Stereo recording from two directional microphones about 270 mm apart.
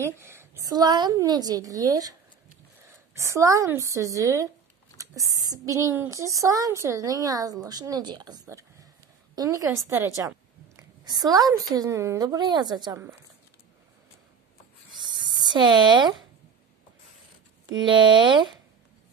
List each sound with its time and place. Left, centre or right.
0.0 s a woman's voice: centre
3.2 s a woman's voice: centre
15.4 s a woman's voice: centre
17.6 s a woman's voice: centre